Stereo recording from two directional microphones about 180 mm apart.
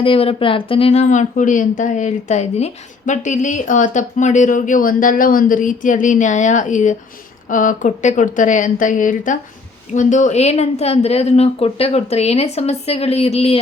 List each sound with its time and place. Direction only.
0.0 s a woman's voice: 30° left (ahead or behind)